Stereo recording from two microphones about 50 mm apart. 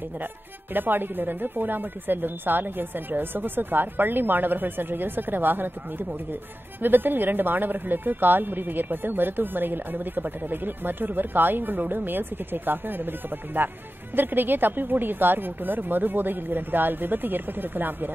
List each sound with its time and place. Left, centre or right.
0.7 s speech: right